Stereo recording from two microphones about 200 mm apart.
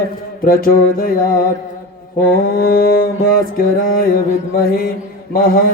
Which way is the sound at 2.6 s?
45° left (ahead or behind).